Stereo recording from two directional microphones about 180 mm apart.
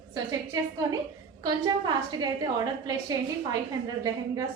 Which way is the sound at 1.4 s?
25° right (ahead or behind).